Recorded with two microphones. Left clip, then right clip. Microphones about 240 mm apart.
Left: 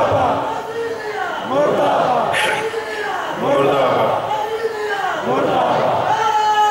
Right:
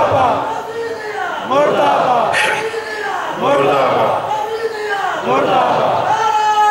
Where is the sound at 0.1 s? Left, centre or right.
Right.